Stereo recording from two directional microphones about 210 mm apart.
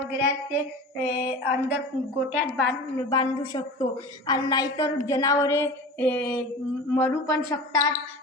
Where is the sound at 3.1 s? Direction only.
20° left (ahead or behind).